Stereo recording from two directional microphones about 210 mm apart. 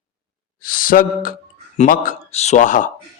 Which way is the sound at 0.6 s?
40° left (ahead or behind).